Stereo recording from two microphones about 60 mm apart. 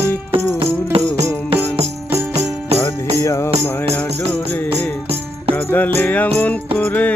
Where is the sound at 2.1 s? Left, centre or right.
Right.